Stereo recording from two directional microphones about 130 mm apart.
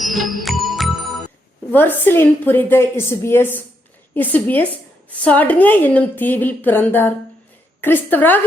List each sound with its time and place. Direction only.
0.0 s music: centre (ahead or behind)
1.7 s a woman's voice: 15° left (ahead or behind)